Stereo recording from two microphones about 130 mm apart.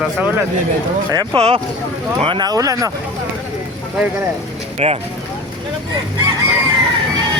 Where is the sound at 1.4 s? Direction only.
50° right (ahead or behind).